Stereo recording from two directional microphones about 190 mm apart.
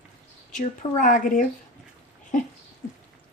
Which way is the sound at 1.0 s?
45° left (ahead or behind).